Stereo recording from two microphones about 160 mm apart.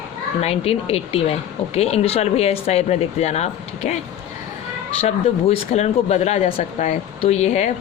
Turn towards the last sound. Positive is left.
turn(degrees=45)  # may be behind; listen again after turning